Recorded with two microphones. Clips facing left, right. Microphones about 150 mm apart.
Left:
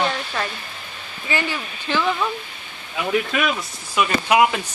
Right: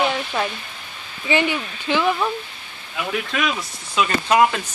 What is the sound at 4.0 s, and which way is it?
Speech, 10° left (ahead or behind).